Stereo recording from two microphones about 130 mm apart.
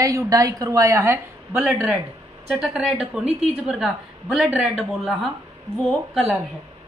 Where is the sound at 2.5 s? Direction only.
5° right (ahead or behind).